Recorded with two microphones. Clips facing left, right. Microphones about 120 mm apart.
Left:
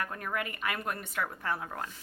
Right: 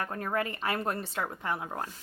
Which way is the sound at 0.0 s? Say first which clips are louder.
Right 3 dB; 30° right (ahead or behind).